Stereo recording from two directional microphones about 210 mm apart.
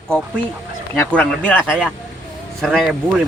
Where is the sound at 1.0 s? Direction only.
5° left (ahead or behind).